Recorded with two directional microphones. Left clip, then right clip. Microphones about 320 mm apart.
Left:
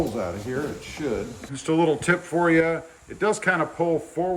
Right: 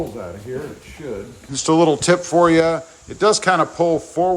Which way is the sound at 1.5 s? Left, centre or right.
Centre.